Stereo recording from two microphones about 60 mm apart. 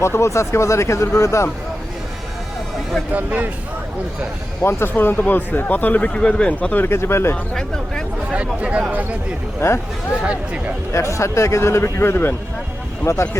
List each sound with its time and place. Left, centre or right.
0.0 s speech: left
3.1 s speech: right
4.6 s speech: left
6.1 s speech: centre
6.8 s a man's voice: left
8.3 s speech: right
9.6 s a man's voice: left
10.9 s a man's voice: left
13.1 s a man's voice: left